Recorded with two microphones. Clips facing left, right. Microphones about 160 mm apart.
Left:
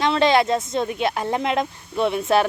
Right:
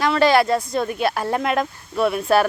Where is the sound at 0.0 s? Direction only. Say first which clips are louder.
Right 1 dB; 25° left (ahead or behind).